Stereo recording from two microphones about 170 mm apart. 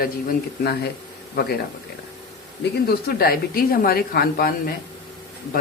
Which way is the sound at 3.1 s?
65° left (ahead or behind).